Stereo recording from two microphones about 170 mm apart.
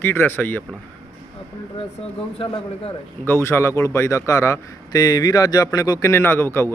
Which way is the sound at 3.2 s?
15° left (ahead or behind).